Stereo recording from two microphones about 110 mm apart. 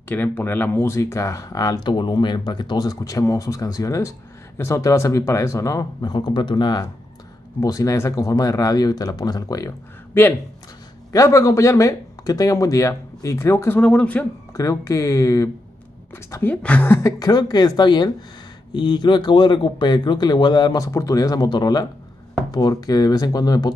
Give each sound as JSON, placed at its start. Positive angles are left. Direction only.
{"t": 0.1, "sound": "speech", "side_deg": 20}
{"t": 7.6, "sound": "speech", "side_deg": 30}
{"t": 10.1, "sound": "speech", "side_deg": 20}
{"t": 11.1, "sound": "speech", "side_deg": 30}
{"t": 13.7, "sound": "speech", "side_deg": 10}
{"t": 14.6, "sound": "speech", "side_deg": 30}
{"t": 17.2, "sound": "speech", "side_deg": 40}